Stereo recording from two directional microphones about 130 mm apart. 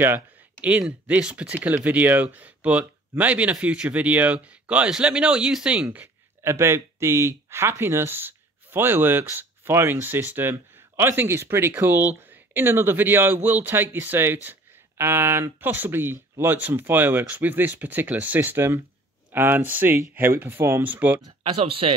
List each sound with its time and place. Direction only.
0.0 s speech: 15° right (ahead or behind)
21.4 s speech: 45° right (ahead or behind)